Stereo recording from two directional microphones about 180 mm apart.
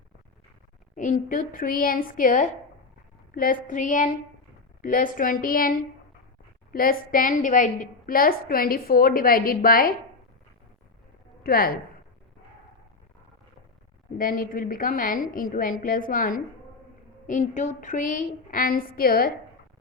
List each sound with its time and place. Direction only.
0.9 s a woman's voice: 45° left (ahead or behind)
11.4 s a woman's voice: 55° left (ahead or behind)
14.2 s a woman's voice: 50° left (ahead or behind)